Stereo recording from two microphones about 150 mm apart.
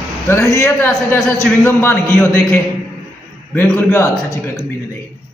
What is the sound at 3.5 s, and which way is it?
Speech, 10° left (ahead or behind).